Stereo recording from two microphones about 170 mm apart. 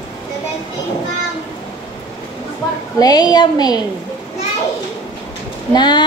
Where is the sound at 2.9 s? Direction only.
25° left (ahead or behind).